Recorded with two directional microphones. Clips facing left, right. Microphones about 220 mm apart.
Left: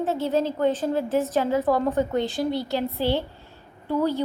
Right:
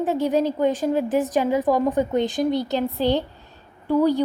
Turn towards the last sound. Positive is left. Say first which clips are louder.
# right 5 dB
turn(degrees=-15)  # may be behind; listen again after turning